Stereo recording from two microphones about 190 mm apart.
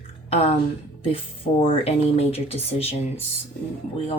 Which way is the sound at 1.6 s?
30° left (ahead or behind).